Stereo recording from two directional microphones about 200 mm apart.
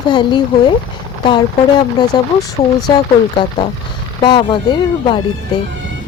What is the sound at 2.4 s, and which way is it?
Speech, 20° left (ahead or behind).